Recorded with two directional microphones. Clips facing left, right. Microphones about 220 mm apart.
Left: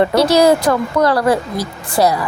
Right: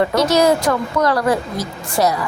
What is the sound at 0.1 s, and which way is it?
A woman's voice, 30° left (ahead or behind).